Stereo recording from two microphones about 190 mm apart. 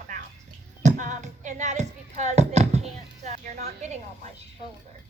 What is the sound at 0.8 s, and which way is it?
Music, 40° right (ahead or behind).